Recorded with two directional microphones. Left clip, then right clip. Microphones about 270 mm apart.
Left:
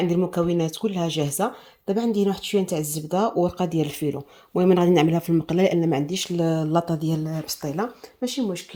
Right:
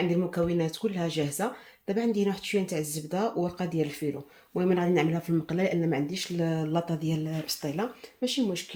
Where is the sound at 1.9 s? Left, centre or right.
Left.